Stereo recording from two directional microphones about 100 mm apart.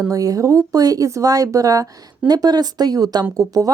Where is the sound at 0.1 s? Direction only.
35° right (ahead or behind).